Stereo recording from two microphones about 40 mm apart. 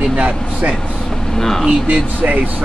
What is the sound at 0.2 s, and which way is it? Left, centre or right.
Speech, right.